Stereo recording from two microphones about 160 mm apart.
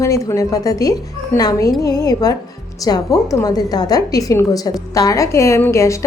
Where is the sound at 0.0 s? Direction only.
20° left (ahead or behind).